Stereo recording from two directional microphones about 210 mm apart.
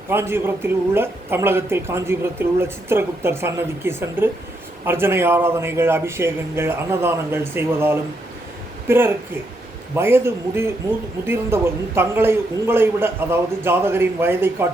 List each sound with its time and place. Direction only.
0.1 s a man's voice: 10° right (ahead or behind)